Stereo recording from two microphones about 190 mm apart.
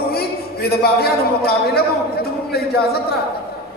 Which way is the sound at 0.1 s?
55° left (ahead or behind).